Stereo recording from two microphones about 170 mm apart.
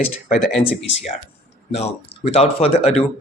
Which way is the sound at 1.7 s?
40° left (ahead or behind).